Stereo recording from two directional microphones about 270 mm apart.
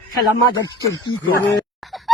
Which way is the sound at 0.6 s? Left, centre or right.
Centre.